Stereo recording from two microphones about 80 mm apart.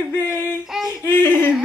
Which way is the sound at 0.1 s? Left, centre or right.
Left.